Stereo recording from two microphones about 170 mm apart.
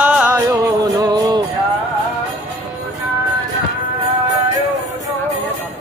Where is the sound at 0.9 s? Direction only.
20° right (ahead or behind).